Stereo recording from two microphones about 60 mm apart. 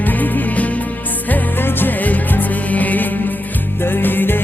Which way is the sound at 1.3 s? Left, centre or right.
Left.